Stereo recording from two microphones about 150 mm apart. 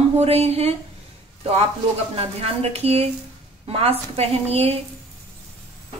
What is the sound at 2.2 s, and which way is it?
A woman's voice, 40° right (ahead or behind).